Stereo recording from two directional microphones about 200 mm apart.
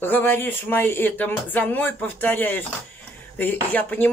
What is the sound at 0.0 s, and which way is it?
Speech, 10° left (ahead or behind).